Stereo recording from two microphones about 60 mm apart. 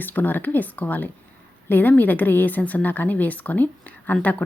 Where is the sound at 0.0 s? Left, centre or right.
Left.